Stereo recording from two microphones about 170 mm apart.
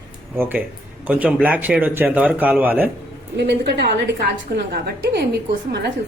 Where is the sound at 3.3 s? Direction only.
75° right (ahead or behind).